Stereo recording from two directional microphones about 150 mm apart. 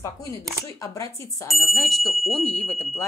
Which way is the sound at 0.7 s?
20° left (ahead or behind).